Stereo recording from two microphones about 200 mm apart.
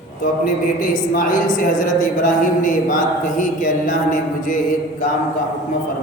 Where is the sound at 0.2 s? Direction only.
40° left (ahead or behind).